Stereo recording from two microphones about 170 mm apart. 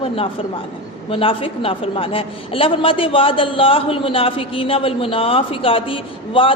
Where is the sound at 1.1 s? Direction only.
35° left (ahead or behind).